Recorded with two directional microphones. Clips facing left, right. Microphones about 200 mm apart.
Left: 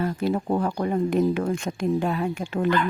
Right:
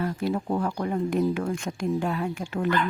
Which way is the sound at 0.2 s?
25° left (ahead or behind).